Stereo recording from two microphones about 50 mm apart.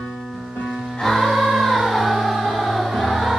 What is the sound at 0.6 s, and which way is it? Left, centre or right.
Music, centre.